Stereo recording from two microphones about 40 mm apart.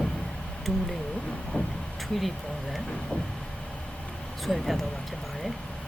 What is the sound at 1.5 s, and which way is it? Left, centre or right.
Speech, left.